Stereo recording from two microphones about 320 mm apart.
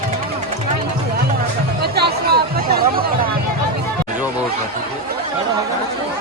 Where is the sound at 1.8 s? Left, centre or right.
Right.